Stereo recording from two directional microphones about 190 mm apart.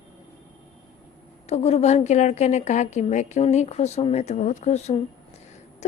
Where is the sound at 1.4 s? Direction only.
35° left (ahead or behind).